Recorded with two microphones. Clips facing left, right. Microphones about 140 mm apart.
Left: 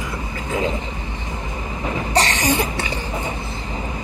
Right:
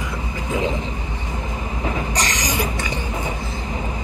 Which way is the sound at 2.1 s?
30° left (ahead or behind).